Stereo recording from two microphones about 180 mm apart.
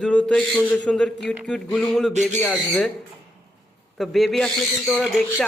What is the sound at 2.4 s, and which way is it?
Speech, 5° left (ahead or behind).